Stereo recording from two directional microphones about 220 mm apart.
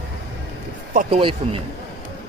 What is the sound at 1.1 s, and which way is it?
Speech, 25° right (ahead or behind).